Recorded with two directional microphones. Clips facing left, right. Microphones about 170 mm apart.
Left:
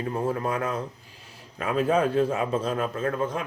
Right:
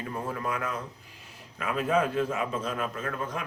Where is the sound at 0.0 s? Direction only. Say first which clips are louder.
Left 6 dB; 30° left (ahead or behind).